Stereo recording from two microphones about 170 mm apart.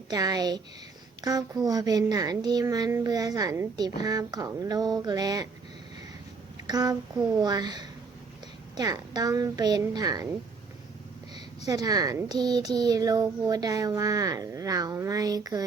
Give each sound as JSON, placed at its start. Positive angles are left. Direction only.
{"t": 0.1, "sound": "speech", "side_deg": -25}
{"t": 6.7, "sound": "speech", "side_deg": -25}
{"t": 11.3, "sound": "speech", "side_deg": -20}